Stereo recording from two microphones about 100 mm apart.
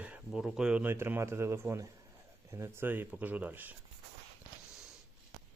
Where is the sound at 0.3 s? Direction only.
5° right (ahead or behind).